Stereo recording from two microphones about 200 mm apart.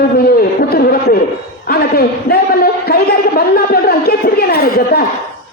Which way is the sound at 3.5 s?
50° left (ahead or behind).